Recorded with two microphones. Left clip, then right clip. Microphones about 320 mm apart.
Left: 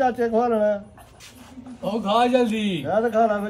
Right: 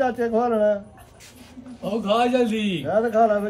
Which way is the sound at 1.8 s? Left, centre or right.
Centre.